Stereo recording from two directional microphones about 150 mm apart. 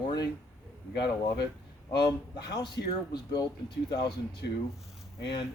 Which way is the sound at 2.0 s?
30° left (ahead or behind).